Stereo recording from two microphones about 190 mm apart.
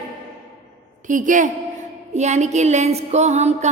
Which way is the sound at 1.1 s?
45° right (ahead or behind).